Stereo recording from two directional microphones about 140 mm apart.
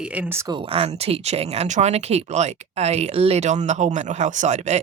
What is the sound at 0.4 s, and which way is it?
Speech, 40° right (ahead or behind).